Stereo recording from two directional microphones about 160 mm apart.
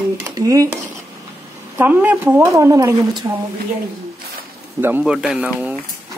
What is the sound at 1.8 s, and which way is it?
Speech, 10° right (ahead or behind).